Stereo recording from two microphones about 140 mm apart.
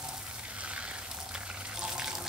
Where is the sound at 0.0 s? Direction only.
5° right (ahead or behind).